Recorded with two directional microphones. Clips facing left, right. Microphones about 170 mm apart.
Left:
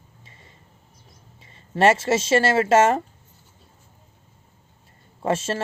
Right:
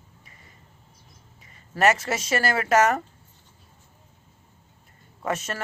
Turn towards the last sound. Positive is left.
turn(degrees=25)  # may be behind; listen again after turning